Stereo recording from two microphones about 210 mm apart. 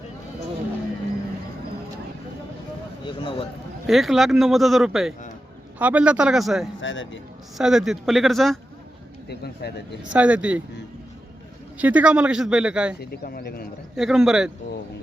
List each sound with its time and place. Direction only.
3.1 s speech: 25° left (ahead or behind)
3.8 s speech: centre (ahead or behind)
6.8 s speech: 65° left (ahead or behind)
7.6 s speech: centre (ahead or behind)
9.3 s speech: 50° left (ahead or behind)
10.1 s speech: 5° right (ahead or behind)
11.8 s speech: 5° right (ahead or behind)
13.0 s speech: 45° left (ahead or behind)
13.9 s speech: centre (ahead or behind)